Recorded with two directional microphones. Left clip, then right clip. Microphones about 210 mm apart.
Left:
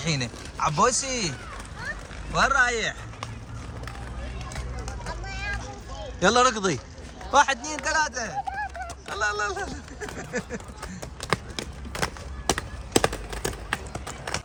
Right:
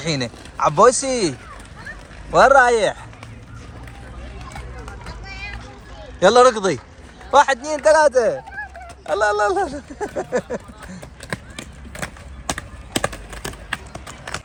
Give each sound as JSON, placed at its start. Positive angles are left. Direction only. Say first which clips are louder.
{"t": 0.0, "sound": "speech", "louder": "right 5 dB", "side_deg": 10}
{"t": 6.1, "sound": "speech", "louder": "right 8 dB", "side_deg": 10}
{"t": 11.2, "sound": "a sound", "louder": "left 3 dB", "side_deg": 25}
{"t": 12.5, "sound": "clip-clop", "louder": "even", "side_deg": 40}